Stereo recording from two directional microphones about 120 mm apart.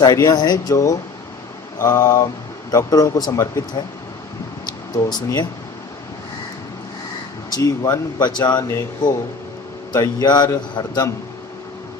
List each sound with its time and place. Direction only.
0.0 s speech: 30° left (ahead or behind)
4.9 s speech: 35° left (ahead or behind)
7.5 s speech: 35° left (ahead or behind)